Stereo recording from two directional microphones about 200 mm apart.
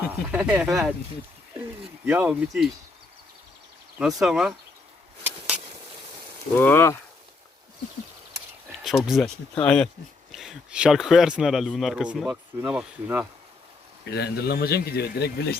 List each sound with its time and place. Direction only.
0.1 s speech: 5° right (ahead or behind)
2.0 s speech: 10° right (ahead or behind)
3.9 s speech: centre (ahead or behind)
6.5 s speech: 10° left (ahead or behind)
9.0 s speech: centre (ahead or behind)
14.0 s speech: 55° left (ahead or behind)